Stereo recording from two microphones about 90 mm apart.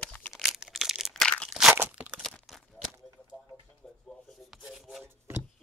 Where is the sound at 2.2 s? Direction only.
5° left (ahead or behind).